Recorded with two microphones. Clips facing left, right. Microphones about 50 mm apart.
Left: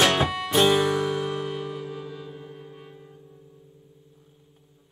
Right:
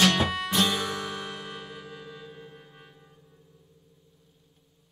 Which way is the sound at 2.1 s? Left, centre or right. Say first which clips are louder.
Left 5 dB; centre.